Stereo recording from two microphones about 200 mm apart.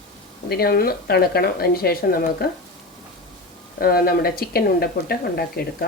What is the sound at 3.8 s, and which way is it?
A woman's voice, 50° left (ahead or behind).